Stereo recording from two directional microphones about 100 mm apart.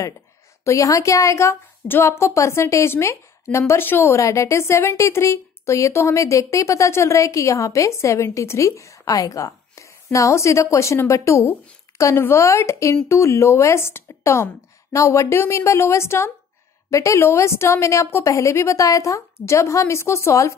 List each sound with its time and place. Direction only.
0.7 s a woman's voice: 35° left (ahead or behind)
9.5 s a sound: 30° left (ahead or behind)
10.1 s speech: 30° left (ahead or behind)